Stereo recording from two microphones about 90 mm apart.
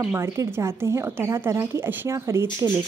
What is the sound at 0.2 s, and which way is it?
Speech, 30° right (ahead or behind).